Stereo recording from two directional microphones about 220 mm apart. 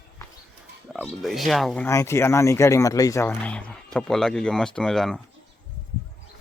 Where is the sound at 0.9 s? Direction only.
5° left (ahead or behind).